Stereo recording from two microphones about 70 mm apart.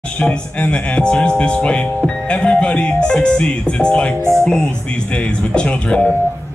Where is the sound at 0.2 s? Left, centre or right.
Centre.